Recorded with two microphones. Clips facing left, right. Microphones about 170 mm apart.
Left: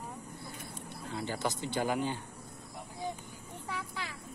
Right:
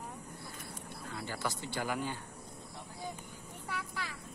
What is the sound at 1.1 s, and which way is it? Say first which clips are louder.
Speech: left 4 dB; 20° left (ahead or behind).